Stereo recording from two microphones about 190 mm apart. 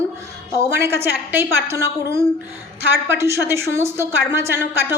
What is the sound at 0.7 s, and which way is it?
A woman's voice, 15° right (ahead or behind).